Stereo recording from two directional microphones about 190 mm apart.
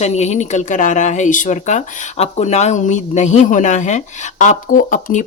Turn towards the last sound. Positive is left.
turn(degrees=45)  # may be behind; listen again after turning